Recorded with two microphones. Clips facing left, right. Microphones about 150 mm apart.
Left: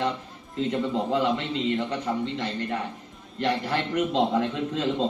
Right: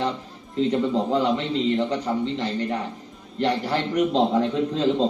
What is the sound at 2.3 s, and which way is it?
Speech, 40° right (ahead or behind).